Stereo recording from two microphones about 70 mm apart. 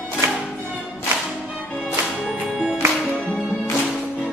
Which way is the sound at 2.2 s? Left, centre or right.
Centre.